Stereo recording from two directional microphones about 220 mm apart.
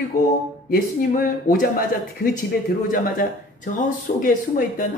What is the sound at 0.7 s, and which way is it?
Speech, 35° left (ahead or behind).